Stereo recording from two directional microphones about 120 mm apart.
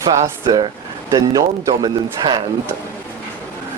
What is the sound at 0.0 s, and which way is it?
Speech, 30° right (ahead or behind).